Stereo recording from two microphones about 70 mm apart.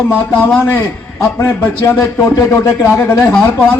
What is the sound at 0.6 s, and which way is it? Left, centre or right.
A man's voice, left.